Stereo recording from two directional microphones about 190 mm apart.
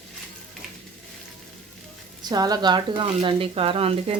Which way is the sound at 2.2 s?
20° right (ahead or behind).